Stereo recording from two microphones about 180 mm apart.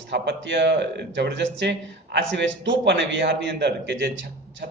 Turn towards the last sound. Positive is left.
turn(degrees=-75)  # may be behind; listen again after turning